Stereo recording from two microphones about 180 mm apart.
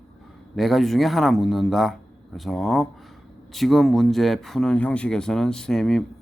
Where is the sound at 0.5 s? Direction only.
Centre (ahead or behind).